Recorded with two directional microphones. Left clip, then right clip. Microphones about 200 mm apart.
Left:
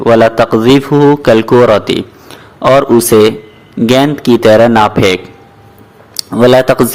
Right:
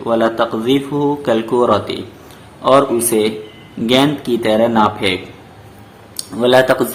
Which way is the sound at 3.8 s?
40° left (ahead or behind).